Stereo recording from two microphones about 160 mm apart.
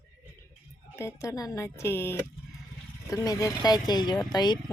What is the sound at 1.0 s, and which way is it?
A woman's voice, 20° left (ahead or behind).